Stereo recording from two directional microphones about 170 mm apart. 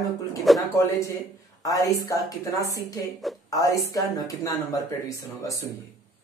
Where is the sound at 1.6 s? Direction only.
20° left (ahead or behind).